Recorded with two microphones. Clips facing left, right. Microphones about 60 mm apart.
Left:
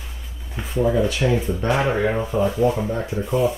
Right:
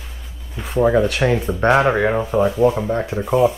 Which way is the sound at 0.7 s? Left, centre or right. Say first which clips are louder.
Right 4 dB; right.